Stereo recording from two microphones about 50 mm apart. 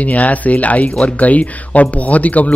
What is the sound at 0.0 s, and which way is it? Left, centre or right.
Speech, left.